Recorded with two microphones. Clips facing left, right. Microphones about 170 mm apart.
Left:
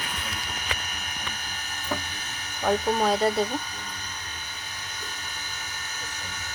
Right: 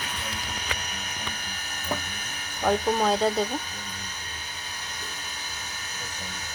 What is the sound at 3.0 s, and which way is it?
Speech, centre (ahead or behind).